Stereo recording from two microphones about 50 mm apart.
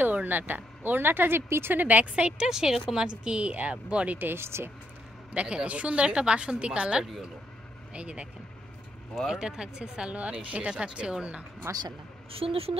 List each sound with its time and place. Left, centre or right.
0.0 s speech: right
1.8 s speech: right
2.3 s a woman's voice: centre
4.2 s speech: right
5.3 s a woman's voice: right
9.3 s a woman's voice: centre
11.7 s speech: right